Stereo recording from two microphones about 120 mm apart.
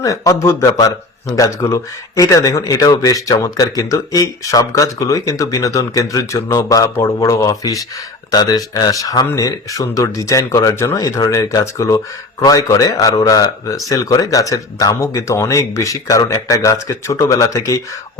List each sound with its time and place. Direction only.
0.0 s speech: 30° left (ahead or behind)